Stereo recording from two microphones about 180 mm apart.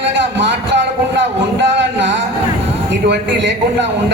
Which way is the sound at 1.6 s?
75° right (ahead or behind).